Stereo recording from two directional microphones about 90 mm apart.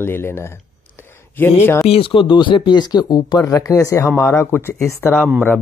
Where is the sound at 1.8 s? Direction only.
80° left.